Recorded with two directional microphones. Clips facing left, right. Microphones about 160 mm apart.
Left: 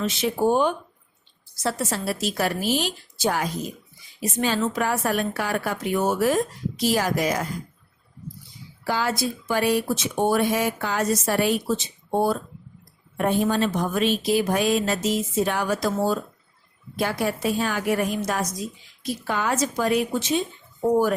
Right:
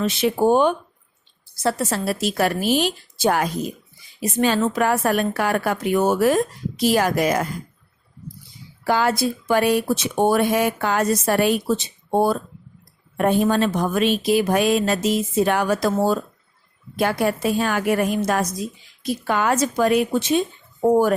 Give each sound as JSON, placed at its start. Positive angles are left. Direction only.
{"t": 0.0, "sound": "speech", "side_deg": -60}
{"t": 8.8, "sound": "speech", "side_deg": -60}